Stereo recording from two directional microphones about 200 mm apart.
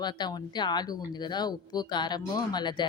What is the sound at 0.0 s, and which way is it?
A woman's voice, 20° left (ahead or behind).